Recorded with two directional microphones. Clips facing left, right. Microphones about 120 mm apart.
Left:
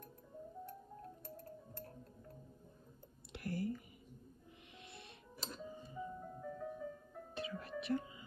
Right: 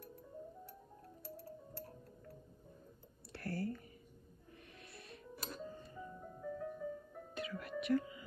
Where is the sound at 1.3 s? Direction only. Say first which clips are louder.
Right 1 dB; 50° left (ahead or behind).